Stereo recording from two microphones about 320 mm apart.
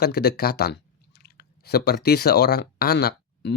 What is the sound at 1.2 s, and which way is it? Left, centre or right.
Chewing, left.